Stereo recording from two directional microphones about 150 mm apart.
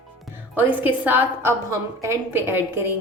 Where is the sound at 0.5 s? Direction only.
10° right (ahead or behind).